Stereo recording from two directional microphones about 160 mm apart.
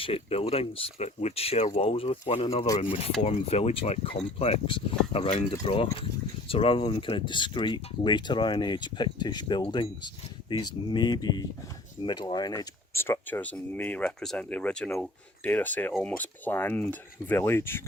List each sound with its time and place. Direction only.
0.0 s speech: 40° left (ahead or behind); by 17.8 s 15° left (ahead or behind)